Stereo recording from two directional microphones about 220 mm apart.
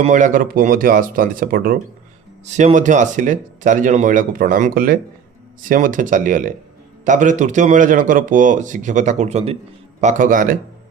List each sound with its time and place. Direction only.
0.0 s a man's voice: 35° right (ahead or behind)